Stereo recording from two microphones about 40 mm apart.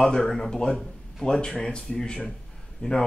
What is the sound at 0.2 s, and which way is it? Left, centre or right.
A man's voice, centre.